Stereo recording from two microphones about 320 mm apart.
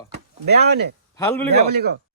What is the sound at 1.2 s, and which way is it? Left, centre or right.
Speech, centre.